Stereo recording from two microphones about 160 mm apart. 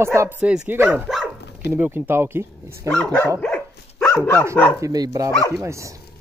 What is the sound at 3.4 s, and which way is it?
Dog, 10° left (ahead or behind).